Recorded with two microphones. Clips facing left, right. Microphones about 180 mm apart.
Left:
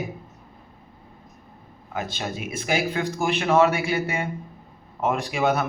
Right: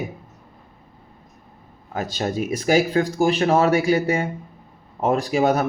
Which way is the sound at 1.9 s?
40° right (ahead or behind).